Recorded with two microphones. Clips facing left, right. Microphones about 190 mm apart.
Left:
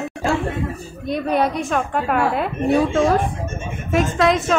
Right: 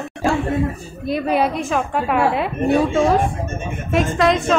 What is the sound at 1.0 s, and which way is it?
A woman's voice, 5° right (ahead or behind).